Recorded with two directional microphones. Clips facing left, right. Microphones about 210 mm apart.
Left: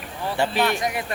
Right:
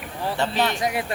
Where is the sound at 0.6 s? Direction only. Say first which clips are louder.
Left 1 dB; 25° right (ahead or behind).